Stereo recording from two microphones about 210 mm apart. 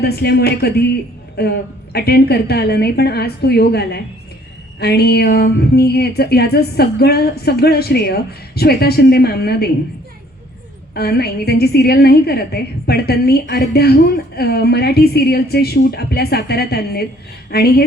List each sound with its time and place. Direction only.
0.0 s a woman's voice: 50° left (ahead or behind)
10.9 s a woman's voice: 50° left (ahead or behind)